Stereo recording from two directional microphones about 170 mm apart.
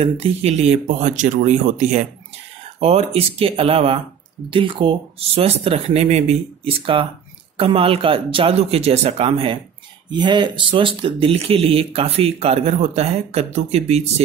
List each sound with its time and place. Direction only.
0.0 s speech: 35° right (ahead or behind)
2.8 s speech: 35° right (ahead or behind)